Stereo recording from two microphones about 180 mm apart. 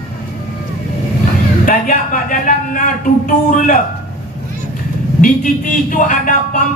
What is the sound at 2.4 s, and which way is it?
A man's voice, 45° left (ahead or behind).